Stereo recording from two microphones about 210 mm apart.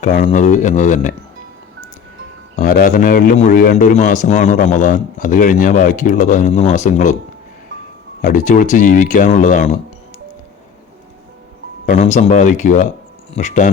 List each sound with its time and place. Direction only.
0.0 s a man's voice: 35° left (ahead or behind)
2.6 s a man's voice: 40° left (ahead or behind)
8.2 s a man's voice: 35° left (ahead or behind)
11.9 s a man's voice: 35° left (ahead or behind)